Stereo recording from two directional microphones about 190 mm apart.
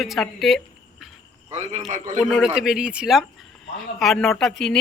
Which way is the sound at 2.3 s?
5° right (ahead or behind).